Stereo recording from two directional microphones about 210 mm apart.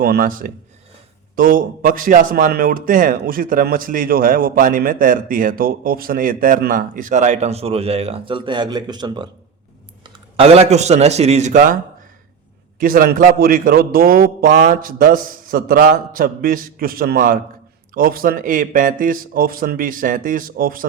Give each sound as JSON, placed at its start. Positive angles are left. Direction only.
{"t": 0.0, "sound": "a man's voice", "side_deg": -45}
{"t": 12.8, "sound": "a man's voice", "side_deg": -45}